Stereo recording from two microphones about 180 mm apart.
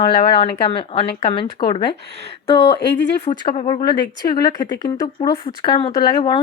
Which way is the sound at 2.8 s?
70° left (ahead or behind).